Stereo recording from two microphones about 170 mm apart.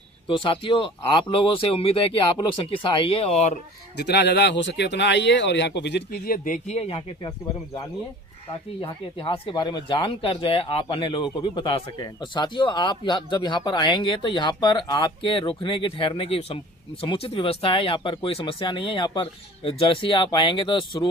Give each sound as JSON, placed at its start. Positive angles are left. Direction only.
{"t": 0.3, "sound": "speech", "side_deg": 30}
{"t": 3.9, "sound": "speech", "side_deg": 75}
{"t": 8.8, "sound": "speech", "side_deg": 30}